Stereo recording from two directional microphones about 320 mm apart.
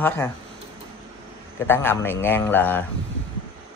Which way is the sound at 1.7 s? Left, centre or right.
Centre.